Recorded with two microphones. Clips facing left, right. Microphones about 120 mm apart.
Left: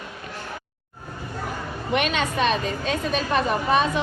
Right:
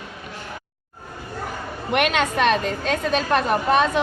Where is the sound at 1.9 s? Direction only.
65° right (ahead or behind).